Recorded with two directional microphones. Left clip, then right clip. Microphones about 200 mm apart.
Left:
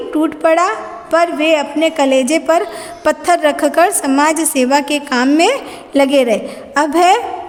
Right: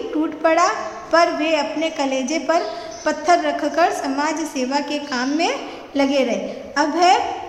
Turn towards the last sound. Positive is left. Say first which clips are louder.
# left 5 dB
turn(degrees=55)  # may be behind; listen again after turning